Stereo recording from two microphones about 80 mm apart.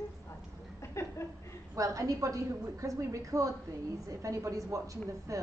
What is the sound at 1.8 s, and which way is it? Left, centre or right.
Speech, right.